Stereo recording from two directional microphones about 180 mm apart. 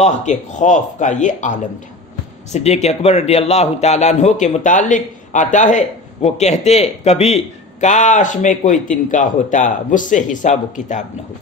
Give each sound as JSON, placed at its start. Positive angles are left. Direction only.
{"t": 0.0, "sound": "a man's voice", "side_deg": 40}